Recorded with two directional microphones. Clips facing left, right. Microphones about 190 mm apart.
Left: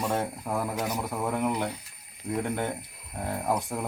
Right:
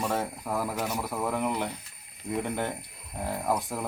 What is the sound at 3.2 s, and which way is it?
Speech, centre (ahead or behind).